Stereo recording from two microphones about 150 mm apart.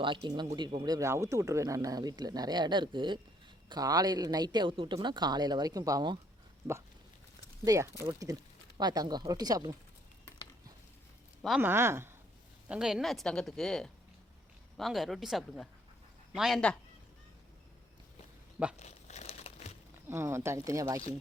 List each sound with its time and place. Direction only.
0.0 s speech: 30° right (ahead or behind)
7.6 s speech: 20° right (ahead or behind)
11.6 s speech: 15° right (ahead or behind)
12.6 s speech: 5° right (ahead or behind)
18.8 s crumpling: 50° left (ahead or behind)
20.1 s speech: 15° right (ahead or behind)